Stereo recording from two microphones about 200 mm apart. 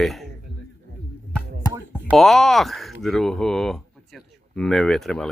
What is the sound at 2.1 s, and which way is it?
Speech, centre (ahead or behind).